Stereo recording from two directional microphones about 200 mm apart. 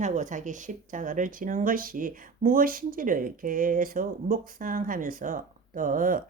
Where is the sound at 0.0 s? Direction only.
40° right (ahead or behind).